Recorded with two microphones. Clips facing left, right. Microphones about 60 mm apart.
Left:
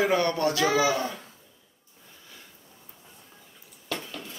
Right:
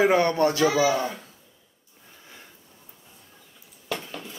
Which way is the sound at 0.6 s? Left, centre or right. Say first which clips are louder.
Right 1 dB; left.